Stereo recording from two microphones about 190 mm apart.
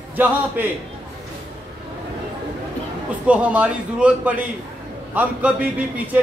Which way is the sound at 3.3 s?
5° right (ahead or behind).